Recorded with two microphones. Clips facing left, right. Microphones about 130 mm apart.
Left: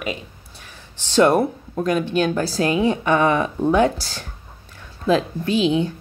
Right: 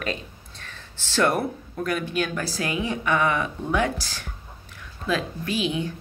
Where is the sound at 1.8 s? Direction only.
25° left (ahead or behind).